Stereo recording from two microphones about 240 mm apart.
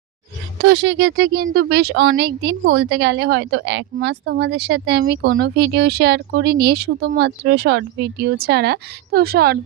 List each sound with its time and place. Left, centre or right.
0.6 s speech: right